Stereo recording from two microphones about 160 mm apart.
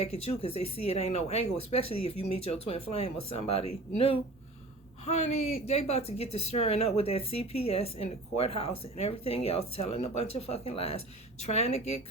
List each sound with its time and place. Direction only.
0.0 s speech: 40° left (ahead or behind)